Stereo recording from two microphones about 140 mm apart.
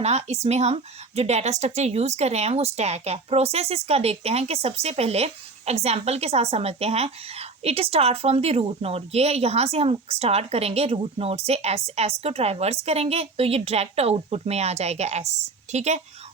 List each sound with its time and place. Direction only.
0.0 s speech: 50° right (ahead or behind)